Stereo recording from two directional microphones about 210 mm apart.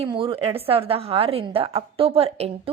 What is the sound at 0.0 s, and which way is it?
A woman's voice, 25° right (ahead or behind).